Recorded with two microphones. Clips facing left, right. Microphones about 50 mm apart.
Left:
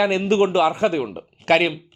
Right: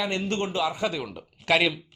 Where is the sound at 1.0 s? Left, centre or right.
Left.